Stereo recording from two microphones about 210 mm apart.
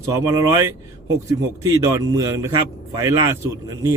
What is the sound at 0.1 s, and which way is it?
Speech, 15° right (ahead or behind).